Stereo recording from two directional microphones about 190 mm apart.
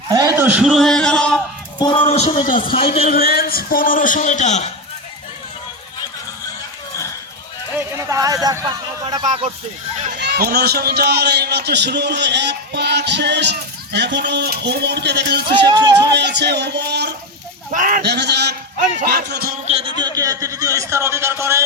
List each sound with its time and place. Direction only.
0.1 s a sound: 20° right (ahead or behind)
0.4 s speech: 5° right (ahead or behind)
1.8 s a man's voice: 25° left (ahead or behind); by 2.7 s 45° left (ahead or behind)
2.7 s a man's voice: 30° left (ahead or behind)
3.2 s speech: 55° left (ahead or behind); by 4.7 s 40° left (ahead or behind)
7.9 s speech: 15° right (ahead or behind)
10.2 s a man's voice: 55° right (ahead or behind)
15.6 s speech: 20° right (ahead or behind)
16.0 s a man's voice: 65° right (ahead or behind)
17.7 s speech: 45° right (ahead or behind)
18.0 s a man's voice: 60° right (ahead or behind)
19.6 s speech: 30° right (ahead or behind)